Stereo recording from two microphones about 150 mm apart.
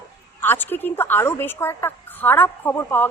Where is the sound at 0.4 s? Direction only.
15° left (ahead or behind).